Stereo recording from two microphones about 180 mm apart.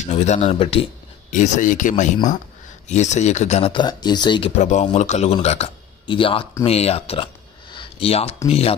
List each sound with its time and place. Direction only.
0.0 s speech: 40° left (ahead or behind)
1.3 s speech: 45° left (ahead or behind); by 4.5 s 25° left (ahead or behind)
4.5 s speech: 40° left (ahead or behind)
7.7 s a sound: 35° left (ahead or behind)
8.5 s speech: 35° left (ahead or behind)